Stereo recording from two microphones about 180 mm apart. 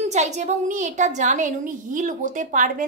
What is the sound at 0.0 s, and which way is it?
A woman's voice, 40° right (ahead or behind).